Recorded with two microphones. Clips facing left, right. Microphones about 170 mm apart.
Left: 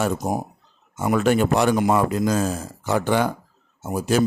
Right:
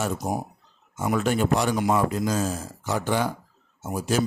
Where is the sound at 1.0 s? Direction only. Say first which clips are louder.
Left 4 dB; 65° left (ahead or behind).